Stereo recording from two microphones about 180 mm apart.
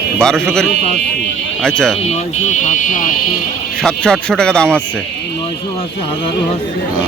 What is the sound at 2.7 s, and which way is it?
Speech, 45° left (ahead or behind).